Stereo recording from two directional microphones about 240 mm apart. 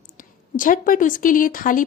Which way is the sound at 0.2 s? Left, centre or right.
Left.